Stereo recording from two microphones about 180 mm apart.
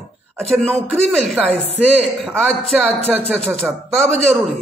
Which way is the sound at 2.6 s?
5° left (ahead or behind).